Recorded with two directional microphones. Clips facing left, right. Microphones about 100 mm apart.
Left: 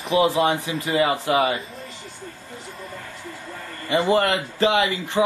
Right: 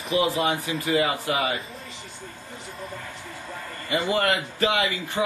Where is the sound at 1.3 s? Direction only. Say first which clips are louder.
Left 5 dB; 45° left (ahead or behind).